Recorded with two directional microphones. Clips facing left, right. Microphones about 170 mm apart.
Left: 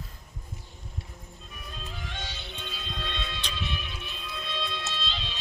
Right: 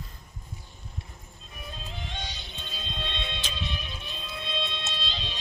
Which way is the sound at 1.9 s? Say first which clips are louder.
Right 1 dB; 25° right (ahead or behind).